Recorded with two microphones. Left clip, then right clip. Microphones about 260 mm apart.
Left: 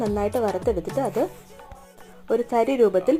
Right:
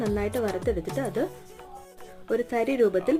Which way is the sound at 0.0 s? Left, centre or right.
Centre.